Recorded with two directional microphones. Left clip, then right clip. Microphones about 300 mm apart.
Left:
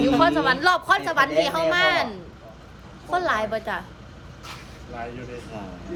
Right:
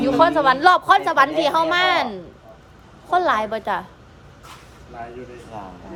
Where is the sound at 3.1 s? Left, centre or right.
Right.